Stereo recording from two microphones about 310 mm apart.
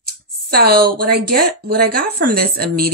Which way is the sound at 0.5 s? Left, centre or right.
Right.